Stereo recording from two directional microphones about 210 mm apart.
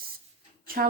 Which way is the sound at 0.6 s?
45° right (ahead or behind).